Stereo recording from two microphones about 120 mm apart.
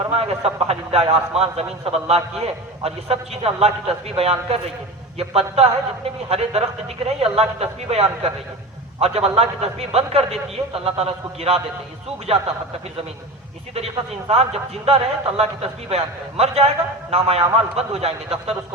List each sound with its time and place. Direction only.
0.2 s a man's voice: 60° right (ahead or behind)
13.7 s a man's voice: 60° right (ahead or behind)